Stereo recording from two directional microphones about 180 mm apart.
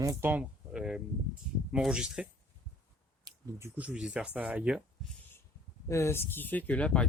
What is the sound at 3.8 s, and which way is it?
Speech, 5° right (ahead or behind).